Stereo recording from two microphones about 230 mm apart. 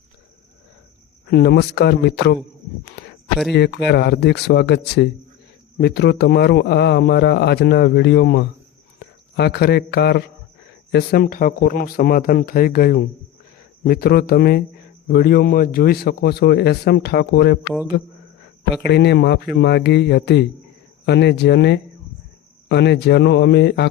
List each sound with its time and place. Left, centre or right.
1.3 s a man's voice: left
3.5 s a man's voice: left